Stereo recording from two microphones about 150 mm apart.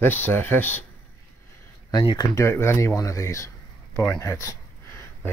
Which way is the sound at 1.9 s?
30° left (ahead or behind).